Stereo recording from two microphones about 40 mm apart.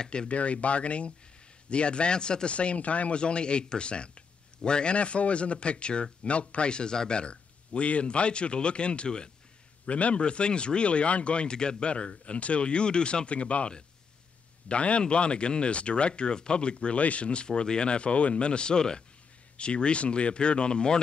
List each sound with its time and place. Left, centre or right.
0.0 s speech: centre
0.3 s speech: left
9.8 s speech: left